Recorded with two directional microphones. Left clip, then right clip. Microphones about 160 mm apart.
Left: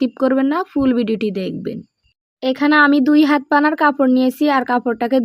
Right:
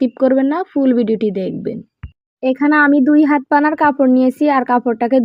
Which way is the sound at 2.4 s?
Centre (ahead or behind).